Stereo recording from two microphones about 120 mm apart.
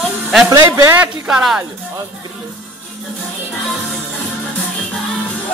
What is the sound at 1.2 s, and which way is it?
Speech, 5° right (ahead or behind).